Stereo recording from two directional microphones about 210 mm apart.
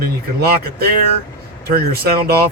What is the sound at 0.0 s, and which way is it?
Speech, 45° right (ahead or behind).